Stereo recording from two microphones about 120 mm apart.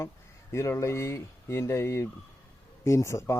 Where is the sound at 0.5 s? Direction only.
25° left (ahead or behind).